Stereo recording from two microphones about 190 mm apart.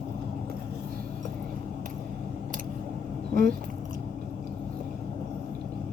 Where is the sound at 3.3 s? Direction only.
50° right (ahead or behind).